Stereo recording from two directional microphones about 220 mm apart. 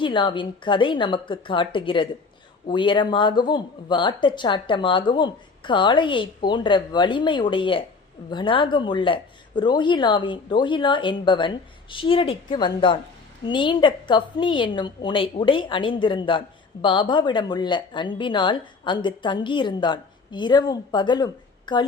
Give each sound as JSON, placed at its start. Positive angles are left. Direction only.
{"t": 0.0, "sound": "speech", "side_deg": 20}